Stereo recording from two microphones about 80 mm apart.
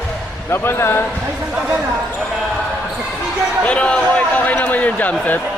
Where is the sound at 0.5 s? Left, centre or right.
Left.